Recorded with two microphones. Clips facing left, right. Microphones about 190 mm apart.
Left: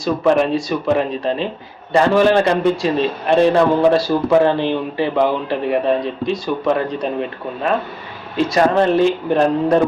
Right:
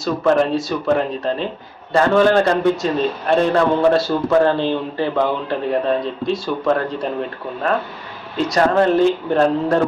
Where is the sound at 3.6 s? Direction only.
5° left (ahead or behind).